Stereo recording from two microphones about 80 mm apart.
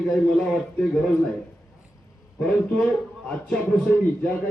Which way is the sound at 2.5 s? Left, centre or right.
Centre.